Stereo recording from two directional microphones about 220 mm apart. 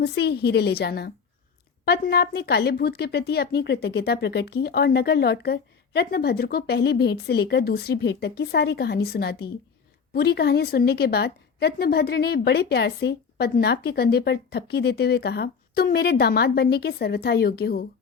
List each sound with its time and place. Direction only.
0.0 s a woman's voice: 50° left (ahead or behind)